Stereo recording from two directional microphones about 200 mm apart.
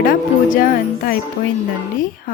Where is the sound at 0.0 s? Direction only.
45° left (ahead or behind).